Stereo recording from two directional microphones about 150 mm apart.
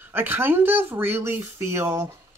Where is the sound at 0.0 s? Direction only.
15° right (ahead or behind).